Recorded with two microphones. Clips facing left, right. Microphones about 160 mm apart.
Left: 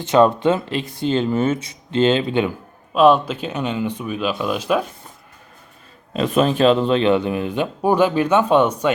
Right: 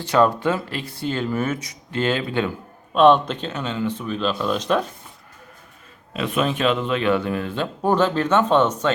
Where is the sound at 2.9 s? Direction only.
5° left (ahead or behind).